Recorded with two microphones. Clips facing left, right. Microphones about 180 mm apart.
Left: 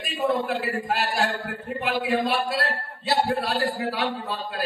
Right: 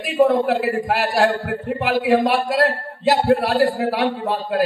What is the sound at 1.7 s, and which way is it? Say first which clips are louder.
A man's voice: right 7 dB; 70° right (ahead or behind).